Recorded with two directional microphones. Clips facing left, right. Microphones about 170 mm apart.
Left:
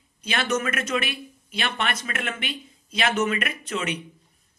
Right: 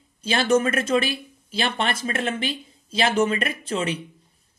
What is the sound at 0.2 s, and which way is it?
Speech, 30° right (ahead or behind).